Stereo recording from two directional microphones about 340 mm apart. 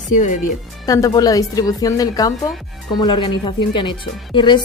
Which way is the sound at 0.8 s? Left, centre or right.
Centre.